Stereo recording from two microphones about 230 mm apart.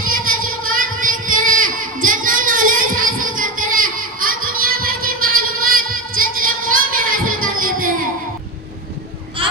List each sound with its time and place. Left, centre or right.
0.0 s child singing: right